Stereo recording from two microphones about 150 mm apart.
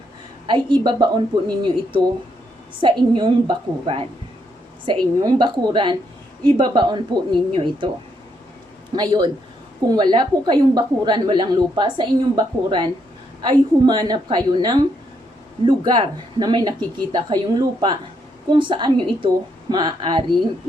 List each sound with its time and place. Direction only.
0.4 s a woman's voice: 30° right (ahead or behind)
9.0 s a woman's voice: 30° right (ahead or behind)